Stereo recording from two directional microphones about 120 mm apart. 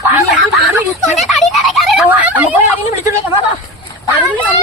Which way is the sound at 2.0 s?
15° right (ahead or behind).